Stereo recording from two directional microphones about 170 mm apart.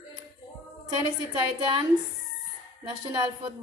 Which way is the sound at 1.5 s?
25° right (ahead or behind).